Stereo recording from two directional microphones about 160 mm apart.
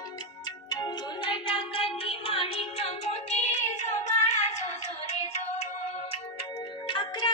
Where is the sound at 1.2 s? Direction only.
30° left (ahead or behind).